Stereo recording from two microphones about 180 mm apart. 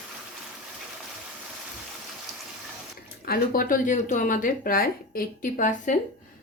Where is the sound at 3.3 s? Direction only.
50° left (ahead or behind).